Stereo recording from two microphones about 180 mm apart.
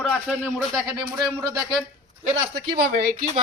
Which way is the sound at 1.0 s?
20° right (ahead or behind).